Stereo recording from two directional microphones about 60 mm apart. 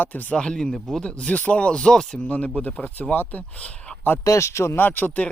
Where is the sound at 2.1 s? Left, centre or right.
Left.